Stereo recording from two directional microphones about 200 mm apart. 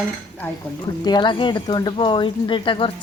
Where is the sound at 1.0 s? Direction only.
20° left (ahead or behind).